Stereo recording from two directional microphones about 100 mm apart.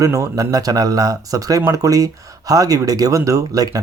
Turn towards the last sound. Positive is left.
turn(degrees=-40)  # may be behind; listen again after turning